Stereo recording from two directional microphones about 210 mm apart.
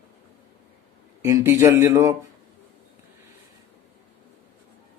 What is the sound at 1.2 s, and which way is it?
Speech, 15° right (ahead or behind).